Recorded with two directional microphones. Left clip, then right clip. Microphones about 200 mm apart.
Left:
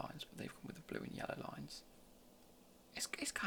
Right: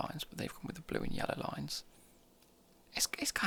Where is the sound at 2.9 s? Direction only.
15° right (ahead or behind).